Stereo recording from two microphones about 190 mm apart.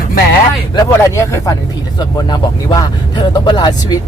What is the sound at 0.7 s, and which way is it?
Speech, 15° left (ahead or behind).